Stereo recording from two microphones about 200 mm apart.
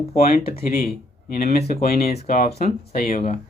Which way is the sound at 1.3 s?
50° left (ahead or behind).